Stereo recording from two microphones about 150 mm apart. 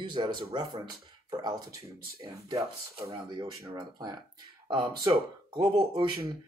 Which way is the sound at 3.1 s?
30° right (ahead or behind).